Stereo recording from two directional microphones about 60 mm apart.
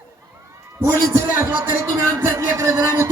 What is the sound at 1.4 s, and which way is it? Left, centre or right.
Music, right.